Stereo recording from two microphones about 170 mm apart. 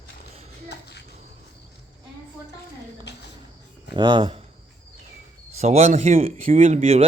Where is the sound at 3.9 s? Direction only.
25° right (ahead or behind).